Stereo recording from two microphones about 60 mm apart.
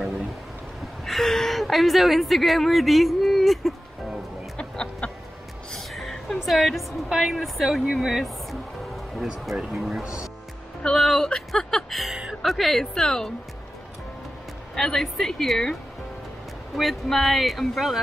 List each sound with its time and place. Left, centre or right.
1.0 s a sound: centre
4.6 s chicken: centre
5.7 s music: centre
6.4 s a woman's voice: centre
10.8 s speech: centre
14.8 s speech: centre